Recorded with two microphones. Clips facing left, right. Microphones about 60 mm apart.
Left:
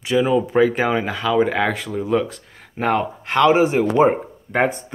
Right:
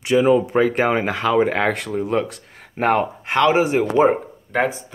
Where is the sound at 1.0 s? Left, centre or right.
Right.